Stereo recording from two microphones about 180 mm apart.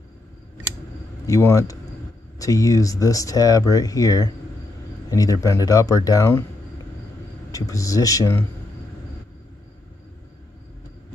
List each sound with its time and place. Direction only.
1.2 s speech: 15° left (ahead or behind)
7.5 s speech: 20° left (ahead or behind)